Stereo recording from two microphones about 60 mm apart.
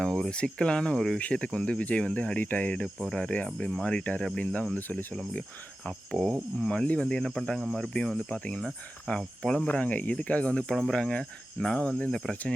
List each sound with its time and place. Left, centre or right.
0.0 s speech: centre; by 5.0 s left
5.8 s speech: centre
9.6 s speech: left